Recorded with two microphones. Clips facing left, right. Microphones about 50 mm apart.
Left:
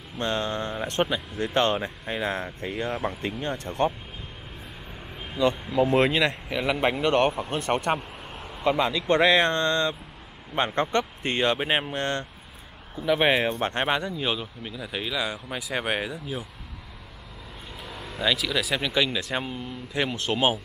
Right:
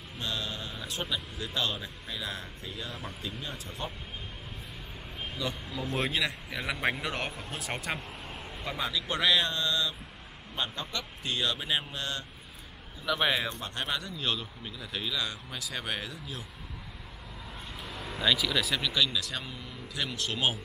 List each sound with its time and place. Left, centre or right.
0.2 s speech: left
5.8 s speech: left
8.6 s speech: left
13.0 s speech: left
13.4 s speech: left
13.7 s speech: left
14.1 s a man's voice: centre
17.7 s vehicle: centre
18.8 s speech: left